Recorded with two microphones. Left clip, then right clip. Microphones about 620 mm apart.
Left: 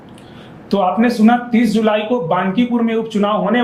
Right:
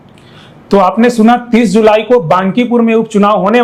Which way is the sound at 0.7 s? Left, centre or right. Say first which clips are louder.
Right 7 dB; right.